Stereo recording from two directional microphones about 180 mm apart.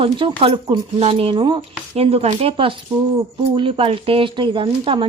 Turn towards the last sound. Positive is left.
turn(degrees=-30)  # may be behind; listen again after turning